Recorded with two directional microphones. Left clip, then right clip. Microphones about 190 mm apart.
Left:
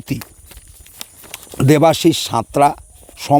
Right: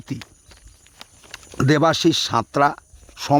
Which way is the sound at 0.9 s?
70° left (ahead or behind).